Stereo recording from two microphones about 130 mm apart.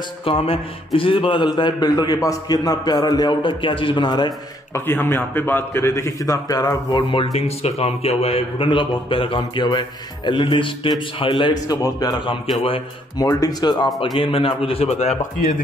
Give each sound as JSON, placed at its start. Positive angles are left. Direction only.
{"t": 0.2, "sound": "a man's voice", "side_deg": 45}
{"t": 4.7, "sound": "a man's voice", "side_deg": 15}
{"t": 13.8, "sound": "a man's voice", "side_deg": 0}
{"t": 14.1, "sound": "a man's voice", "side_deg": 45}